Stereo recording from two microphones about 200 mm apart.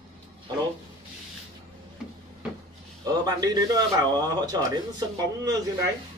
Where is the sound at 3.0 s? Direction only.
20° right (ahead or behind).